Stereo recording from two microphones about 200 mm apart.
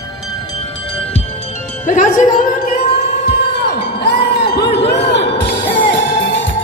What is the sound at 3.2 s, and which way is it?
Music, 55° left (ahead or behind).